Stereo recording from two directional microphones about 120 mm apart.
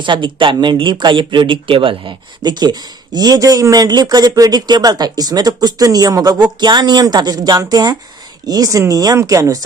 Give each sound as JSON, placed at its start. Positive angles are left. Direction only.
{"t": 0.0, "sound": "a man's voice", "side_deg": -40}